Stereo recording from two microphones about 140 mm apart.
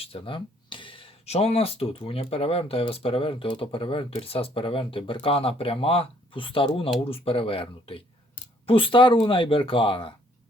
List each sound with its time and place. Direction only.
0.0 s speech: 40° left (ahead or behind)